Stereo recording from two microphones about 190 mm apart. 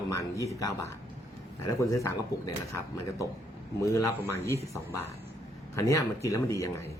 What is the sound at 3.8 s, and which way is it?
A man's voice, 15° left (ahead or behind).